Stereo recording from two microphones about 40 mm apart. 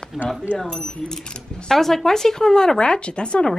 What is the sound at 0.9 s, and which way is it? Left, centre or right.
Speech, centre.